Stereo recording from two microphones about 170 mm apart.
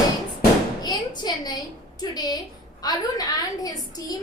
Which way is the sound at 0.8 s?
25° left (ahead or behind).